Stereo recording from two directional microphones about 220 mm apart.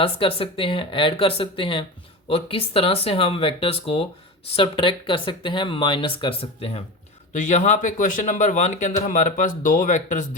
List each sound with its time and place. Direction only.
0.0 s speech: 25° left (ahead or behind)